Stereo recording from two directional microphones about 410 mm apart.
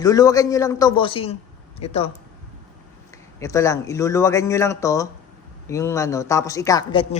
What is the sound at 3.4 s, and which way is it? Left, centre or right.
A woman's voice, centre.